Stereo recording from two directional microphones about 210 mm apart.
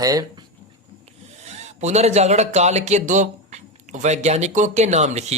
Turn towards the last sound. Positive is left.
turn(degrees=-30)  # may be behind; listen again after turning